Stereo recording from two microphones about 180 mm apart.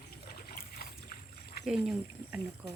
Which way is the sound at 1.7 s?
5° right (ahead or behind).